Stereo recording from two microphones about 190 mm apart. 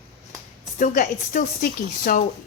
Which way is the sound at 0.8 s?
45° left (ahead or behind).